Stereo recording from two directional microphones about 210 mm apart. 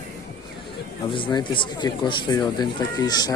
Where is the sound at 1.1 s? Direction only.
25° left (ahead or behind).